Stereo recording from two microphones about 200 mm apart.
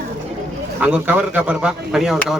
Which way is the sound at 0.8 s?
10° right (ahead or behind).